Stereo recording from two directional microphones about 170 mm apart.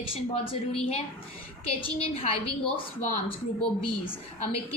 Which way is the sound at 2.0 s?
35° left (ahead or behind).